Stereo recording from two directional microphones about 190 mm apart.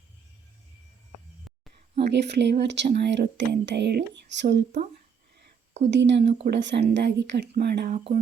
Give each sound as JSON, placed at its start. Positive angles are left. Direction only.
{"t": 2.1, "sound": "speech", "side_deg": -65}
{"t": 5.9, "sound": "speech", "side_deg": -65}
{"t": 7.9, "sound": "speech", "side_deg": -40}